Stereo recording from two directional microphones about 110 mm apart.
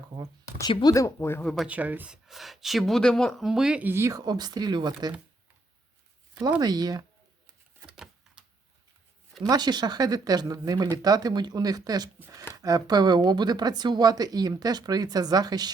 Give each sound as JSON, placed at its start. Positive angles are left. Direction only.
{"t": 0.1, "sound": "speech", "side_deg": -35}
{"t": 0.7, "sound": "speech", "side_deg": 45}
{"t": 0.9, "sound": "speech", "side_deg": 25}
{"t": 1.6, "sound": "speech", "side_deg": -15}
{"t": 2.2, "sound": "speech", "side_deg": 0}
{"t": 3.8, "sound": "speech", "side_deg": -25}
{"t": 6.6, "sound": "speech", "side_deg": -35}
{"t": 7.9, "sound": "a sound", "side_deg": -5}
{"t": 9.5, "sound": "speech", "side_deg": -40}